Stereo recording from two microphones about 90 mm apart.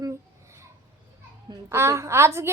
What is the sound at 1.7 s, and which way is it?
Speech, 30° right (ahead or behind).